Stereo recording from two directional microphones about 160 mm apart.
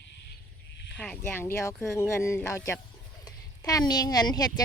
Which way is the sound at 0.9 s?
5° left (ahead or behind).